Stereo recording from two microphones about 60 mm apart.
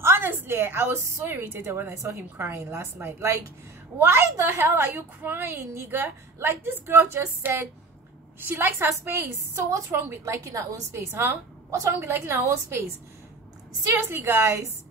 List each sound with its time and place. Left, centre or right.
0.0 s a woman's voice: right
9.6 s a woman's voice: right
13.8 s a woman's voice: right